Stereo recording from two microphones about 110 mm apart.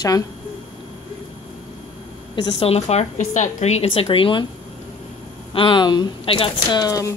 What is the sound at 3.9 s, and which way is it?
Speech, 55° left (ahead or behind).